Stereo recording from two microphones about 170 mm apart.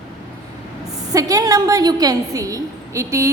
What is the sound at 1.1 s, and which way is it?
A woman's voice, 20° right (ahead or behind).